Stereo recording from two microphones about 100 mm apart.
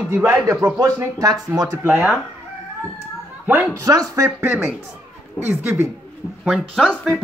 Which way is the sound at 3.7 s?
35° right (ahead or behind).